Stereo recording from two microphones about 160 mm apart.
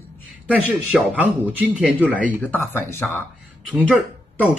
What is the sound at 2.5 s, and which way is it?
Speech, 15° left (ahead or behind).